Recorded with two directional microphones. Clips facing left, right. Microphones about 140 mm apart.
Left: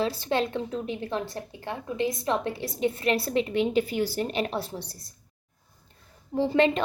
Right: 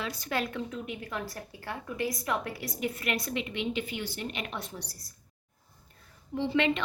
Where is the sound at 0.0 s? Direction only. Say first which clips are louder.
Left 7 dB; 30° left (ahead or behind).